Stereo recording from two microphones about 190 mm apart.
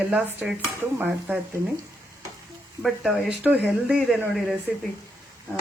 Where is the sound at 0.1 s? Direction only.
10° right (ahead or behind).